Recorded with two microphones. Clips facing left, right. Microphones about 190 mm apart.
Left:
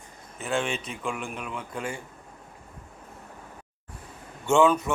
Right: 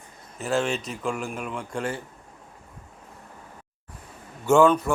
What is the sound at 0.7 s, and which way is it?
Speech, 40° right (ahead or behind).